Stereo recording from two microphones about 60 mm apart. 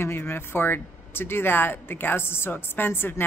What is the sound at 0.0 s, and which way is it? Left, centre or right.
Speech, left.